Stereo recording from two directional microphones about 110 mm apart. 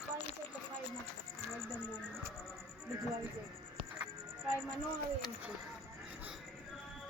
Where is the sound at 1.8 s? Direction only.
10° left (ahead or behind).